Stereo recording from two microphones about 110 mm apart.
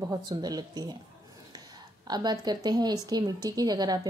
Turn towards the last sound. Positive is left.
turn(degrees=-35)  # may be behind; listen again after turning